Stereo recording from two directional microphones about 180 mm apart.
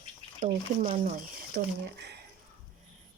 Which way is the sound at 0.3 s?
40° right (ahead or behind).